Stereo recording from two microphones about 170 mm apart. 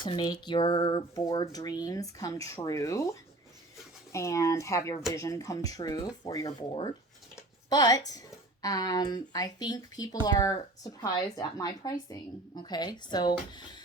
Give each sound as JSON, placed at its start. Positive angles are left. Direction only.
{"t": 0.0, "sound": "speech", "side_deg": 25}
{"t": 4.1, "sound": "speech", "side_deg": 15}
{"t": 7.3, "sound": "a sound", "side_deg": 20}
{"t": 8.6, "sound": "speech", "side_deg": 20}